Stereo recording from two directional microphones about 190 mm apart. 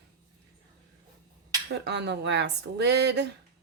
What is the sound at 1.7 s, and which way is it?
Speech, 65° right (ahead or behind).